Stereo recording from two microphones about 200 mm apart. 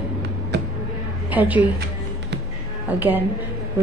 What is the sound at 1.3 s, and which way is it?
Speech, 10° right (ahead or behind).